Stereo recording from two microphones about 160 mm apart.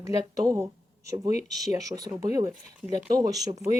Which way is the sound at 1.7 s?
20° right (ahead or behind).